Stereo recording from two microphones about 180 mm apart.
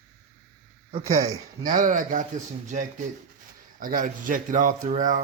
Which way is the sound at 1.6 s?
50° right (ahead or behind).